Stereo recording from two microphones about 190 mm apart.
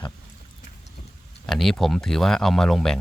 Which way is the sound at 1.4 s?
Centre (ahead or behind).